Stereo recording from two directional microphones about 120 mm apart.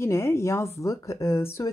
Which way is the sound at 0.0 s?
20° left (ahead or behind).